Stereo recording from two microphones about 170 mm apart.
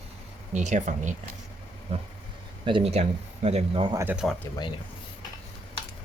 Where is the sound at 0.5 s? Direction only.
45° right (ahead or behind).